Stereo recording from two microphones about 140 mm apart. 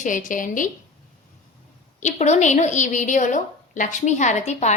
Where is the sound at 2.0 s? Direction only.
55° left (ahead or behind).